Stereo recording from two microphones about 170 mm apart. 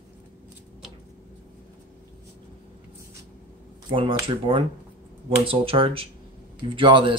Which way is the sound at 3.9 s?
30° right (ahead or behind).